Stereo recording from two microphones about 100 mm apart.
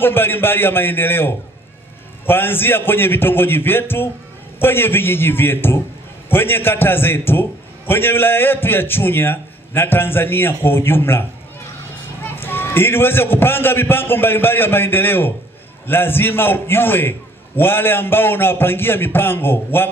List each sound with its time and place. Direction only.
0.0 s a man's voice: 20° left (ahead or behind)